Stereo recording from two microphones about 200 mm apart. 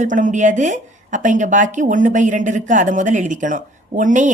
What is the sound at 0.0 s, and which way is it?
A woman's voice, 40° right (ahead or behind).